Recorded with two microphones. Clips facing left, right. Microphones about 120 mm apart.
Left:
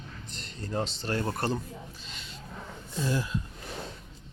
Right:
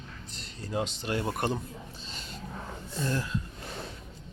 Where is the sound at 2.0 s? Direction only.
35° right (ahead or behind).